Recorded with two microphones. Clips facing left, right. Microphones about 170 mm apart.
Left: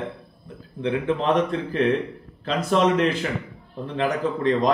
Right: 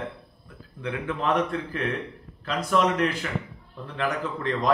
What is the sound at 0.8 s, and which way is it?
A man's voice, 25° left (ahead or behind).